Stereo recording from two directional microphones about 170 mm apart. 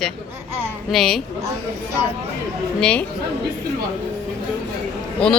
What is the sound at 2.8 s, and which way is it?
Speech, 10° left (ahead or behind).